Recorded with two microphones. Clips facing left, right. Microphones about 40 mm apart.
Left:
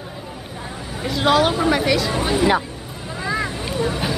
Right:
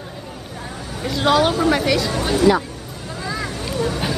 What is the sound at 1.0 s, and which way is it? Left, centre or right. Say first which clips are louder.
Speech: even; centre.